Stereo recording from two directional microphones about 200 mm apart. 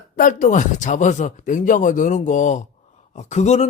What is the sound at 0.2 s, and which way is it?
Speech, 40° left (ahead or behind).